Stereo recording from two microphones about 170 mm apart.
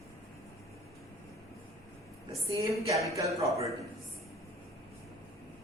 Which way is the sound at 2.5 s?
20° right (ahead or behind).